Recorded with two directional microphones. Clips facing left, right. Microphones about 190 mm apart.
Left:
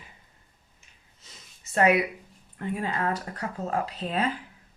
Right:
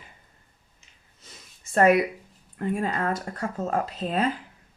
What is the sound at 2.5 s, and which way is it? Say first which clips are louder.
Speech: right 3 dB; 40° right (ahead or behind).